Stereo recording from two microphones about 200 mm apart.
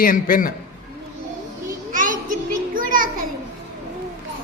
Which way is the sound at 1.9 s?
40° right (ahead or behind).